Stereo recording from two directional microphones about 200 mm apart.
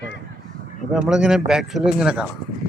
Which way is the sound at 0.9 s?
5° right (ahead or behind).